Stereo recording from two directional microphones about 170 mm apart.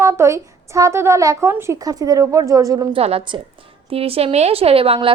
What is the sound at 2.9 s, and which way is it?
A woman's voice, 35° right (ahead or behind).